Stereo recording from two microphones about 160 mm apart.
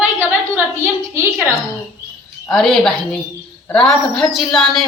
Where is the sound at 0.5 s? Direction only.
15° right (ahead or behind).